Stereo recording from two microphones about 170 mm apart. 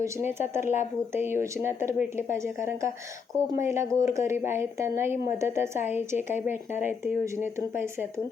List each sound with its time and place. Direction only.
0.0 s speech: 15° right (ahead or behind)
0.6 s speech: 45° left (ahead or behind)
1.1 s speech: 15° right (ahead or behind)